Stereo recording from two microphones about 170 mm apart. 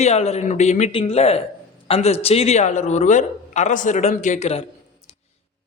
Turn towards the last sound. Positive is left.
turn(degrees=40)  # may be behind; listen again after turning